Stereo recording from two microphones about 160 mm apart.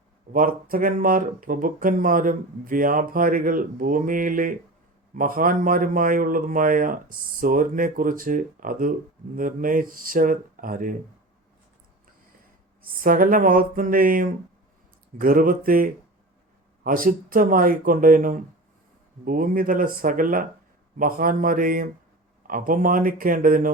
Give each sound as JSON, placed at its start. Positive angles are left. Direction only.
{"t": 0.3, "sound": "a man's voice", "side_deg": -60}
{"t": 12.8, "sound": "a man's voice", "side_deg": -65}